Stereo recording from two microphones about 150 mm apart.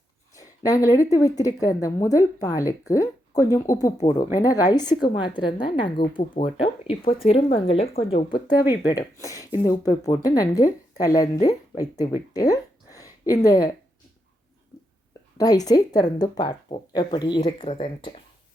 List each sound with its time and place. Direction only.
0.3 s a sound: 25° left (ahead or behind)
1.1 s speech: 25° left (ahead or behind); by 7.9 s 40° left (ahead or behind)
8.7 s speech: 25° left (ahead or behind)
15.4 s speech: 25° left (ahead or behind); by 17.8 s 40° left (ahead or behind)